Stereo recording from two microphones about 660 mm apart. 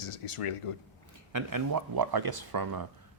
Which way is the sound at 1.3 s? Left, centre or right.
Right.